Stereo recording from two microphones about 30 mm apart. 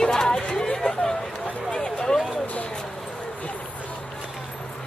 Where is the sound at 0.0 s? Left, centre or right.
Left.